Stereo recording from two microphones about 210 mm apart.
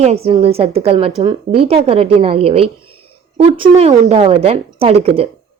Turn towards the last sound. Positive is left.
turn(degrees=-30)  # may be behind; listen again after turning